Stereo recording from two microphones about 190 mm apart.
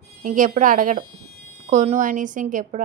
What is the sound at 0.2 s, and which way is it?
Speech, 45° right (ahead or behind).